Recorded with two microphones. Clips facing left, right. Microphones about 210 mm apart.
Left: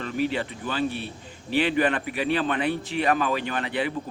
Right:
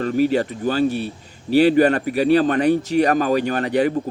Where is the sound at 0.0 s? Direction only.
45° right (ahead or behind).